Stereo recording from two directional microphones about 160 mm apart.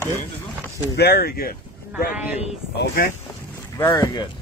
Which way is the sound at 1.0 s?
85° left.